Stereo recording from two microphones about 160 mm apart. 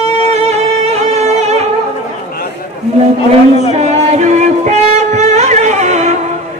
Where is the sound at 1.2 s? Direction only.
45° right (ahead or behind).